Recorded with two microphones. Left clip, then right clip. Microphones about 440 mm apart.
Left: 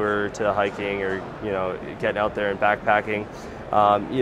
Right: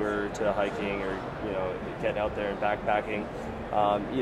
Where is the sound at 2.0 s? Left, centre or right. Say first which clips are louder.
Left 7 dB; left.